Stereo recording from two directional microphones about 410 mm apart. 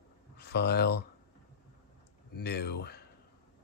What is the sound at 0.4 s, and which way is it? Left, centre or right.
Speech, left.